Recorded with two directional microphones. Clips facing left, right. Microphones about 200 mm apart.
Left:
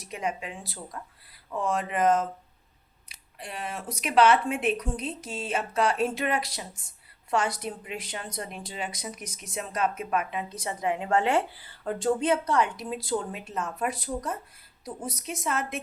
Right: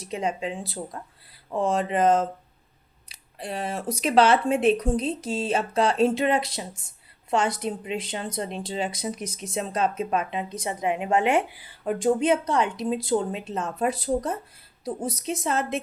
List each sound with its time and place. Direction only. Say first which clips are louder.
0.0 s a woman's voice: right 5 dB; 25° right (ahead or behind)